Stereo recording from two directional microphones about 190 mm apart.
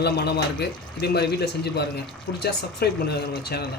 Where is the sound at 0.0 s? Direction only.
60° left (ahead or behind).